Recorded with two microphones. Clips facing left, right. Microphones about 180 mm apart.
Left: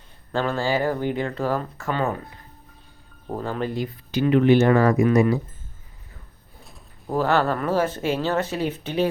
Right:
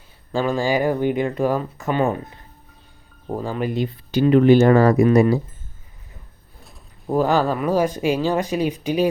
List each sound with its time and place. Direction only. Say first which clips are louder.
0.3 s speech: right 3 dB; 15° right (ahead or behind)
3.2 s speech: right 3 dB; 5° right (ahead or behind)
3.8 s speech: right 4 dB; 30° right (ahead or behind)
7.1 s speech: right 3 dB; 15° right (ahead or behind)